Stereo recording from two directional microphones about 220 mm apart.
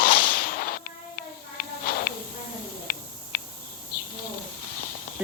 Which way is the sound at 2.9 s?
45° left (ahead or behind).